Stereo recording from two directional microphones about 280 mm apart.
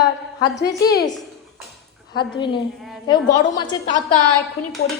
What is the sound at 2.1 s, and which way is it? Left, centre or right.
A woman's voice, centre.